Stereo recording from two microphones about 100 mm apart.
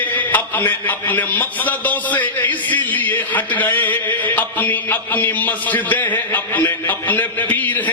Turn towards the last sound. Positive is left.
turn(degrees=20)  # may be behind; listen again after turning